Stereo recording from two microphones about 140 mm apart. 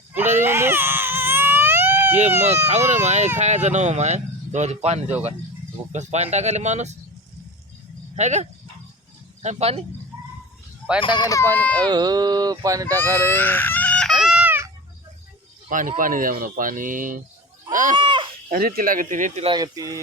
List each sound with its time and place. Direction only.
0.1 s baby cry: 15° right (ahead or behind)
2.4 s speech: 55° right (ahead or behind)
8.1 s speech: 55° right (ahead or behind)
11.0 s speech: 30° left (ahead or behind)
11.5 s speech: 10° left (ahead or behind)
11.9 s speech: 30° right (ahead or behind)
13.2 s baby cry: 15° left (ahead or behind)
14.3 s a sound: 10° right (ahead or behind)
15.7 s speech: 70° right (ahead or behind)
17.9 s a sound: 35° right (ahead or behind)
18.5 s speech: 85° right; by 19.5 s 65° right (ahead or behind)
19.5 s speech: 30° right (ahead or behind)